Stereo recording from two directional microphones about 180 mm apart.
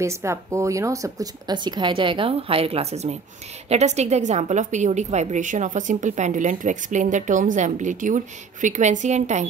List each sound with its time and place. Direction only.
0.0 s a woman's voice: 15° right (ahead or behind); by 9.5 s 40° right (ahead or behind)